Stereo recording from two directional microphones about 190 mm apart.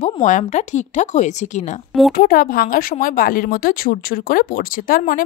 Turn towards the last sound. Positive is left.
turn(degrees=50)  # may be behind; listen again after turning